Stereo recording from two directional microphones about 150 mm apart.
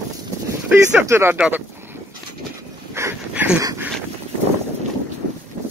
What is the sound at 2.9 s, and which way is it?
Dog, 15° right (ahead or behind).